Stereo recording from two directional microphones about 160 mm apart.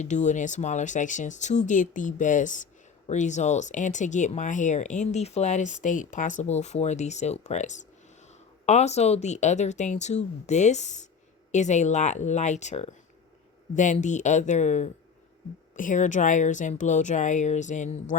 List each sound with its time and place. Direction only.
0.0 s speech: 50° left (ahead or behind)